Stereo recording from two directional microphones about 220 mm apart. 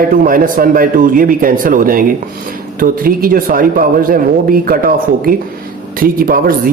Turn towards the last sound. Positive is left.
turn(degrees=-40)  # may be behind; listen again after turning